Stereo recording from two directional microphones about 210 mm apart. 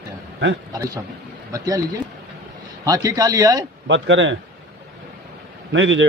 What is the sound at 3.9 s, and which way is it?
Speech, 60° right (ahead or behind).